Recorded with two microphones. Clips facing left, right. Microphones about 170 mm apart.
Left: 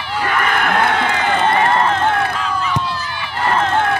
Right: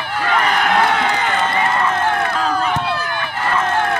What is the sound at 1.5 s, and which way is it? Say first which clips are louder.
Run: left 4 dB; 55° left (ahead or behind).